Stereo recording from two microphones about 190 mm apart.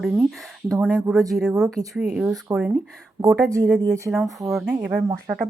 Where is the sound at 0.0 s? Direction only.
Centre (ahead or behind).